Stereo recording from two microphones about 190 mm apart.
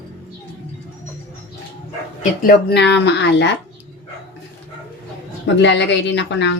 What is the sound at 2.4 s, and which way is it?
Speech, 60° left (ahead or behind).